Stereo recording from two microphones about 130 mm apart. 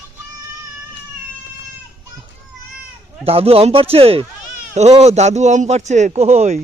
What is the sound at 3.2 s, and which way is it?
Speech, 50° right (ahead or behind).